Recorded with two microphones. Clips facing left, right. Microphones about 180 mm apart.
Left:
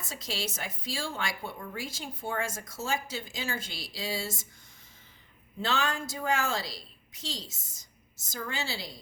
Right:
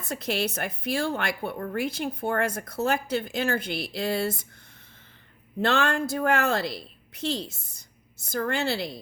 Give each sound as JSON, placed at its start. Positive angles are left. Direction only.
{"t": 0.0, "sound": "speech", "side_deg": -60}
{"t": 5.5, "sound": "speech", "side_deg": -60}